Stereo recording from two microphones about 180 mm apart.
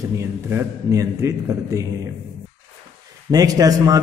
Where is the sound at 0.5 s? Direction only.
15° right (ahead or behind).